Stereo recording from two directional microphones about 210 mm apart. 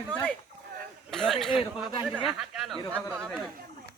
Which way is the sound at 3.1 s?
Centre (ahead or behind).